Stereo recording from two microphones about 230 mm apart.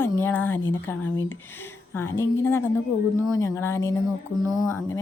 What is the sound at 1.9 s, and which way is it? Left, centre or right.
A woman's voice, centre.